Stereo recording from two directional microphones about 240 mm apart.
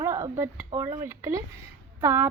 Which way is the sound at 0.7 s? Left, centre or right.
Right.